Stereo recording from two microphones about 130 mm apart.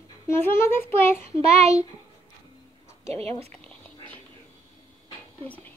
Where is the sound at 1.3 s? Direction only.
55° right (ahead or behind).